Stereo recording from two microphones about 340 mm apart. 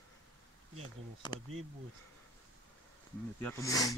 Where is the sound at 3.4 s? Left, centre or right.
Centre.